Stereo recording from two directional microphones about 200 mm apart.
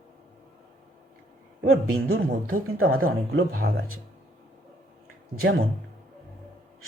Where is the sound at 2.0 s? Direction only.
50° right (ahead or behind).